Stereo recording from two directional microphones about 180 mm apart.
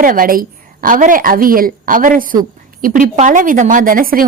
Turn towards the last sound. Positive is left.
turn(degrees=-50)  # may be behind; listen again after turning